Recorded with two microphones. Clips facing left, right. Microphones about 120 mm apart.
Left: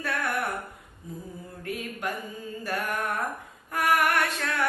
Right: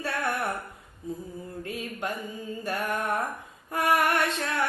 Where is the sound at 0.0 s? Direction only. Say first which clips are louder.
Right 1 dB; 25° right (ahead or behind).